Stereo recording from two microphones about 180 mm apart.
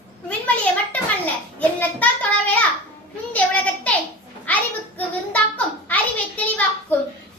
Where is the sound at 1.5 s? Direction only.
10° left (ahead or behind).